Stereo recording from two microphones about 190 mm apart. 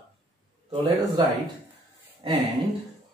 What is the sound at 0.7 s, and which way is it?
Speech, 20° right (ahead or behind).